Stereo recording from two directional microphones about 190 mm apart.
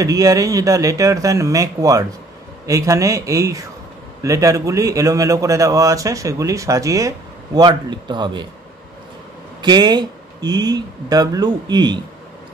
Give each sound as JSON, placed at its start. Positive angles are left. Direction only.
{"t": 0.0, "sound": "a man's voice", "side_deg": -20}
{"t": 9.6, "sound": "speech", "side_deg": -20}